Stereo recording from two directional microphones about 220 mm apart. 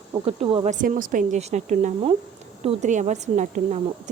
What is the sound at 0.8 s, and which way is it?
A woman's voice, 40° right (ahead or behind).